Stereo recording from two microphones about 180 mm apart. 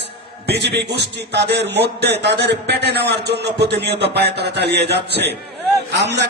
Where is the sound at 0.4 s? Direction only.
70° right (ahead or behind).